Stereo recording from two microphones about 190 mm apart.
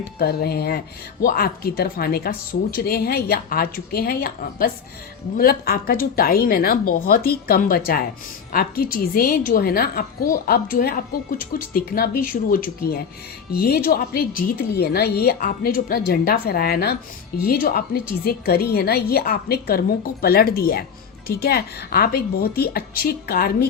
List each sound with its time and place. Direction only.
0.2 s a woman's voice: 55° left (ahead or behind)